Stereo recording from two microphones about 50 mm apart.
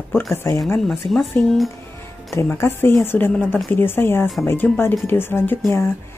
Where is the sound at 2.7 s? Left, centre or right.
Left.